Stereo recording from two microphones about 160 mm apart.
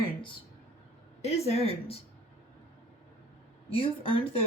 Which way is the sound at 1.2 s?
40° left (ahead or behind).